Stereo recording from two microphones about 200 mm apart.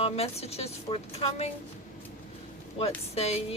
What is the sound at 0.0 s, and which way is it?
Speech, 30° left (ahead or behind).